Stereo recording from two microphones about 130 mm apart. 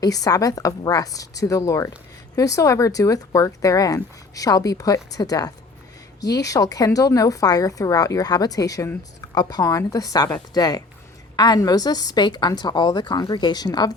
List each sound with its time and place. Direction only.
0.0 s a woman's voice: 30° left (ahead or behind)